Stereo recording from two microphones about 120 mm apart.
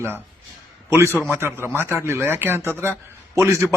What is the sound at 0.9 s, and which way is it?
A man's voice, 20° right (ahead or behind).